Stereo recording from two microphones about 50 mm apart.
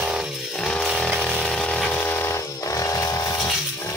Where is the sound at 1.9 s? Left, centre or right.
Left.